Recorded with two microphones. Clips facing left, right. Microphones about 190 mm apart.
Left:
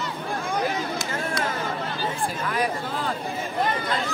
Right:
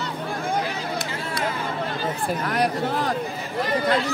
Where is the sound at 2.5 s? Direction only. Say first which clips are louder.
Right 5 dB; 70° right (ahead or behind).